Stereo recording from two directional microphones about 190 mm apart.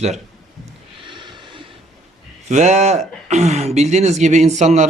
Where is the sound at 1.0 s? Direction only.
25° right (ahead or behind).